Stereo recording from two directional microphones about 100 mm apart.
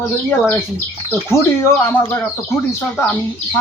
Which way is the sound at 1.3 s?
25° left (ahead or behind).